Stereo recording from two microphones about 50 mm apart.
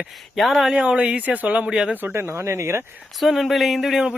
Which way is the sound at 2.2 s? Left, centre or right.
Right.